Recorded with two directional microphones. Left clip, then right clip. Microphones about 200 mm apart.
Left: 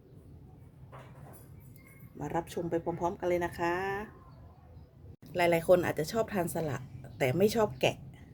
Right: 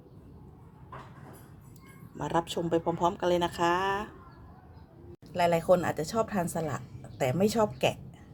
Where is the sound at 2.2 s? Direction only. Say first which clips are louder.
Right 5 dB; 25° right (ahead or behind).